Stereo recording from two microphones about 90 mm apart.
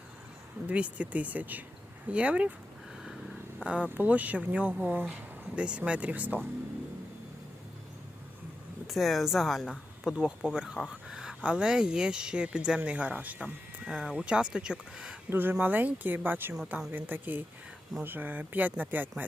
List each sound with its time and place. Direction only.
0.7 s speech: 15° right (ahead or behind)
3.6 s speech: 15° right (ahead or behind)
8.9 s speech: centre (ahead or behind)
15.3 s speech: 25° right (ahead or behind)